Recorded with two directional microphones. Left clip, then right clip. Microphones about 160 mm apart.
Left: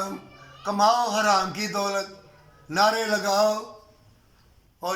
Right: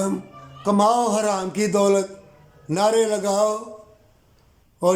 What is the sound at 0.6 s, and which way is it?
A man's voice, 25° right (ahead or behind).